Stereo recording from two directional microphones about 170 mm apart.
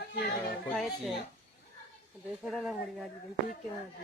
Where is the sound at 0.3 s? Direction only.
Centre (ahead or behind).